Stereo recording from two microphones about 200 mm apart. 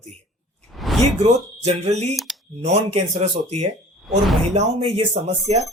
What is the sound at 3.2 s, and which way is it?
Speech, 30° right (ahead or behind).